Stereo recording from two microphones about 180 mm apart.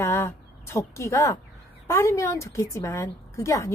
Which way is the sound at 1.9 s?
15° left (ahead or behind).